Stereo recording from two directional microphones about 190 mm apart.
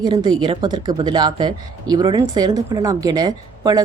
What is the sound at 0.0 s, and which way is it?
A woman's voice, 20° right (ahead or behind).